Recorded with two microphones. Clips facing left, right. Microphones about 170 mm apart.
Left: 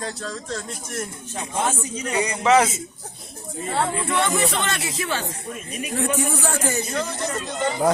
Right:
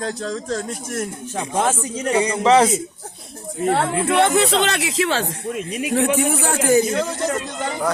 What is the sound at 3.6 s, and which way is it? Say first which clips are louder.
Speech: right 6 dB; 70° right (ahead or behind).